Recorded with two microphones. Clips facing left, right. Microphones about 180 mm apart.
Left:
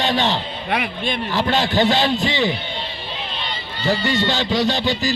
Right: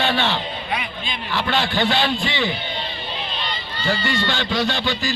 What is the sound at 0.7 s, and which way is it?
Speech, 60° left (ahead or behind).